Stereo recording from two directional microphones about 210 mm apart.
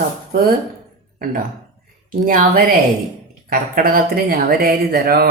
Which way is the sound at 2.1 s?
40° right (ahead or behind).